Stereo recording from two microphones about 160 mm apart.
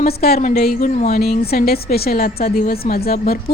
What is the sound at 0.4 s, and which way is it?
Speech, 60° left (ahead or behind).